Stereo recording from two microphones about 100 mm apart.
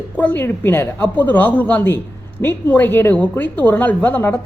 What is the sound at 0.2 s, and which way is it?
A woman's voice, 20° left (ahead or behind).